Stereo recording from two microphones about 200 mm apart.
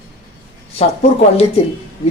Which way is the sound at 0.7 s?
30° left (ahead or behind).